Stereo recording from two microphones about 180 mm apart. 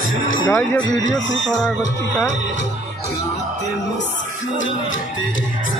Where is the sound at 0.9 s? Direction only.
90° left.